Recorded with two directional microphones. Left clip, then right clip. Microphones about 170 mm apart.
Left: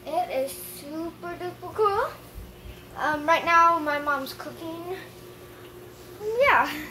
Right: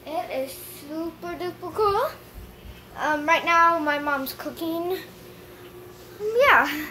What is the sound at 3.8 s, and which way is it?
Speech, 20° right (ahead or behind).